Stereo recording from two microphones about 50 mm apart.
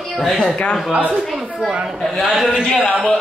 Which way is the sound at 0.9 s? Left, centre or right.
Right.